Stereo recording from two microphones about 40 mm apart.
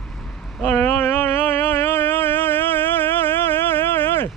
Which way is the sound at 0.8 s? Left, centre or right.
Left.